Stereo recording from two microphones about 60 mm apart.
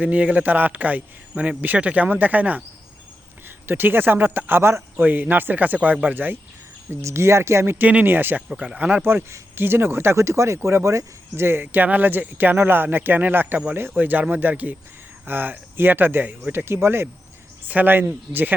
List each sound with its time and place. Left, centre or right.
0.0 s a man's voice: right
3.7 s a man's voice: right
7.0 s speech: right
8.4 s speech: centre
9.0 s speech: right
11.4 s speech: right
17.7 s speech: right